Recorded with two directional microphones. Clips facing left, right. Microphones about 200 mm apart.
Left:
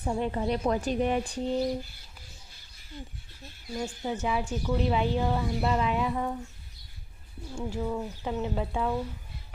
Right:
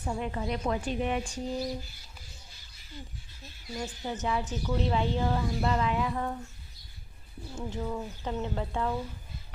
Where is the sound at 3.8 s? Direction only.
15° left (ahead or behind).